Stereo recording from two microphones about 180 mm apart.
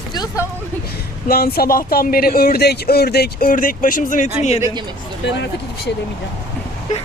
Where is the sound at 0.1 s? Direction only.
20° left (ahead or behind).